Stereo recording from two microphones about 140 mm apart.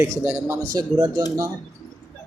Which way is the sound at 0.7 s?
30° right (ahead or behind).